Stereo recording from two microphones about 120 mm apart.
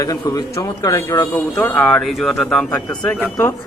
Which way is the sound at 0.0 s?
30° left (ahead or behind).